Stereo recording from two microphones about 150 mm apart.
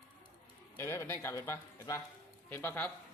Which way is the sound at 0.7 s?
20° left (ahead or behind).